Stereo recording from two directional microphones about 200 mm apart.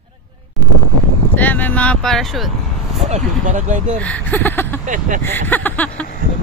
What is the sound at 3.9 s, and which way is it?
Speech, 5° left (ahead or behind).